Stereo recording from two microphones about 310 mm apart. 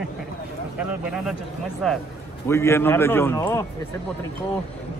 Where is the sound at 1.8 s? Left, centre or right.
Centre.